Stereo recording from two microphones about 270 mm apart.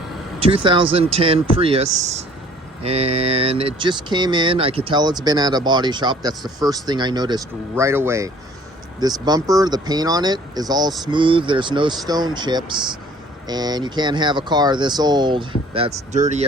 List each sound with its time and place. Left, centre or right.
0.3 s speech: centre